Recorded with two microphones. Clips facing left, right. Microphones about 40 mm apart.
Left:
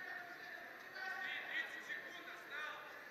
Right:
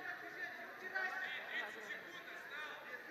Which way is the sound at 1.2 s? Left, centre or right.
Centre.